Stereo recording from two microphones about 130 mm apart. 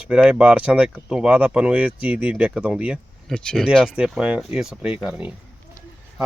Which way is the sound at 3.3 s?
5° left (ahead or behind).